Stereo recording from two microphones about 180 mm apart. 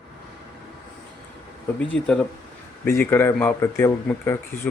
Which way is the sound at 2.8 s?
15° left (ahead or behind).